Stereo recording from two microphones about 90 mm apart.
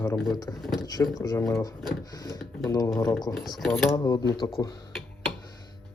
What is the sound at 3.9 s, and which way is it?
Speech, 50° left (ahead or behind).